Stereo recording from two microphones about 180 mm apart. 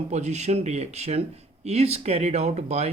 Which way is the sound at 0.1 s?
40° right (ahead or behind).